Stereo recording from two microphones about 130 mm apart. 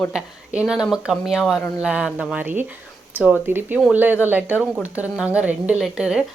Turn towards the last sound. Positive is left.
turn(degrees=-5)  # may be behind; listen again after turning